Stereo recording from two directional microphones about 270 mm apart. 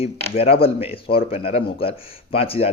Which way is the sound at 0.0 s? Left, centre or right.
Left.